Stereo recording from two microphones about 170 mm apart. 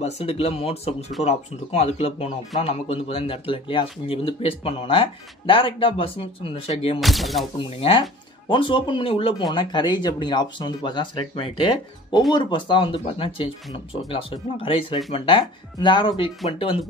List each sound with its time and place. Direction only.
0.0 s speech: 35° left (ahead or behind)
7.0 s speech: centre (ahead or behind)
7.5 s speech: 30° left (ahead or behind)